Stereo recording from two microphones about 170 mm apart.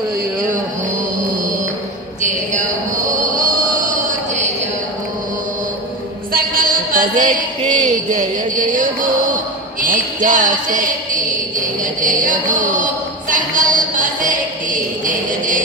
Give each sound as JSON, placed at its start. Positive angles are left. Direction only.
{"t": 3.2, "sound": "music", "side_deg": -50}
{"t": 6.3, "sound": "music", "side_deg": -55}
{"t": 9.8, "sound": "a sound", "side_deg": -50}
{"t": 11.8, "sound": "music", "side_deg": -50}